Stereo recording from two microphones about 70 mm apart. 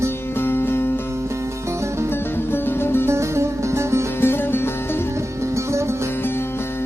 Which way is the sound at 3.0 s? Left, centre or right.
Right.